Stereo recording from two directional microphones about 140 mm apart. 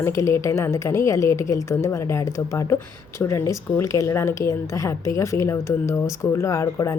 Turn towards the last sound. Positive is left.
turn(degrees=20)  # may be behind; listen again after turning